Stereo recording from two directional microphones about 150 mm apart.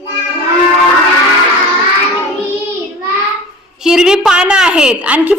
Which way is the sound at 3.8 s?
5° right (ahead or behind).